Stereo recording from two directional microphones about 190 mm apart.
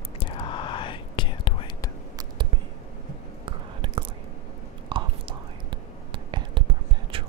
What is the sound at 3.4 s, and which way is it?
Whispering, 25° right (ahead or behind).